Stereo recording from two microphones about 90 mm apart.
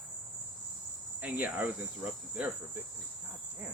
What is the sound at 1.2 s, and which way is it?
Cricket, 20° right (ahead or behind).